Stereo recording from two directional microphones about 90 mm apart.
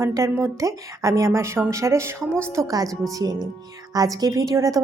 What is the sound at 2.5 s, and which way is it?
Speech, 40° right (ahead or behind).